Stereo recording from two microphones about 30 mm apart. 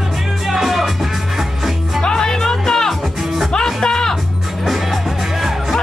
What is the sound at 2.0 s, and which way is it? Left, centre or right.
Music, left.